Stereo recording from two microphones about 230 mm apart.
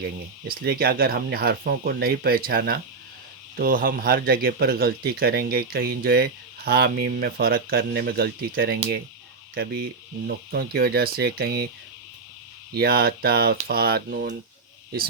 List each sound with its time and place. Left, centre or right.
0.4 s speech: right
10.2 s speech: right
12.7 s speech: right